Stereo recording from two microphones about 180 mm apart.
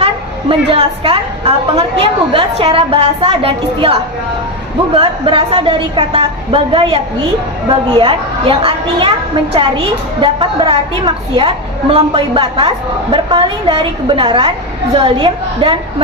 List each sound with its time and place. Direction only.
0.0 s a woman's voice: 30° right (ahead or behind)
4.9 s a woman's voice: 30° right (ahead or behind)